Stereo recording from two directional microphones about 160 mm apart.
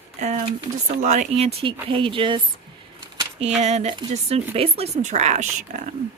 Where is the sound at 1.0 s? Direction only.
45° right (ahead or behind).